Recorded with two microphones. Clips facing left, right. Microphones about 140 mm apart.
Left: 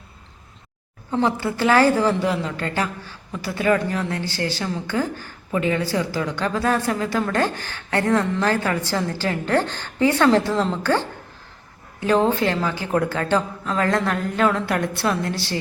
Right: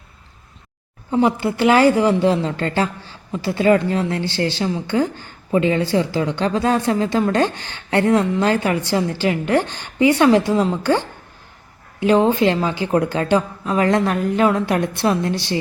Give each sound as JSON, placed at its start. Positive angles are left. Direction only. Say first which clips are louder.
{"t": 1.1, "sound": "a woman's voice", "louder": "right 4 dB", "side_deg": -15}
{"t": 2.2, "sound": "a woman's voice", "louder": "right 5 dB", "side_deg": -30}